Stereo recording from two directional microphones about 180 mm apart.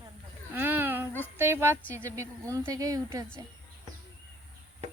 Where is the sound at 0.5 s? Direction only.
10° right (ahead or behind).